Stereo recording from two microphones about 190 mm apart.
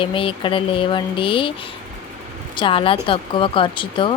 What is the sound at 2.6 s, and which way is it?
Speech, 25° left (ahead or behind).